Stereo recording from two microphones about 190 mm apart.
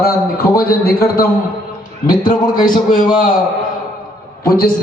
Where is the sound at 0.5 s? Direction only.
50° left (ahead or behind).